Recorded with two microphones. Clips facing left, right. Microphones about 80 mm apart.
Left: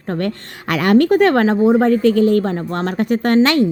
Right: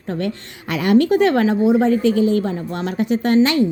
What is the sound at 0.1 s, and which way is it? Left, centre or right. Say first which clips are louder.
A woman's voice: left 2 dB; left.